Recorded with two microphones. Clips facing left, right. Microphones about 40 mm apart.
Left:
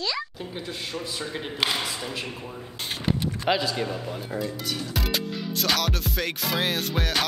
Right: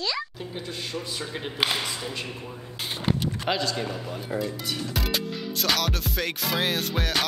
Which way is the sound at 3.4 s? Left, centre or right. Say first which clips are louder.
Left 3 dB; centre.